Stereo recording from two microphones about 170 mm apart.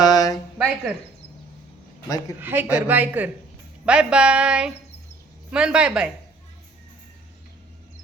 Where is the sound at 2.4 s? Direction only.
10° right (ahead or behind).